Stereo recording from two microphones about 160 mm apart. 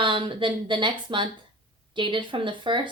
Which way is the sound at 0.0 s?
30° right (ahead or behind).